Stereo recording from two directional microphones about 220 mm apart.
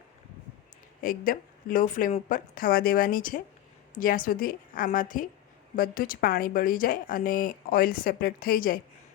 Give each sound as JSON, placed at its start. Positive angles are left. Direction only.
{"t": 1.0, "sound": "speech", "side_deg": 40}